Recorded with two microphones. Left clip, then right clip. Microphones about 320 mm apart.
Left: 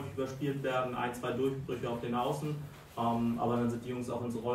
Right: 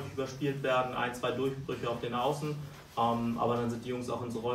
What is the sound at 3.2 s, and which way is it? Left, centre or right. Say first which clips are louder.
Speech: right 1 dB; centre.